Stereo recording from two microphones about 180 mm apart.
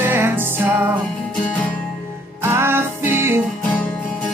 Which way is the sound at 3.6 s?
10° left (ahead or behind).